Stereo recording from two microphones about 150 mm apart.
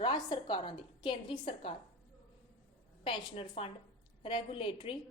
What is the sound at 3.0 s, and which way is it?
A woman's voice, 35° left (ahead or behind).